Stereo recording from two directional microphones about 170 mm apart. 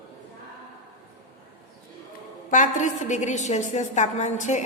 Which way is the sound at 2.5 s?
45° left (ahead or behind).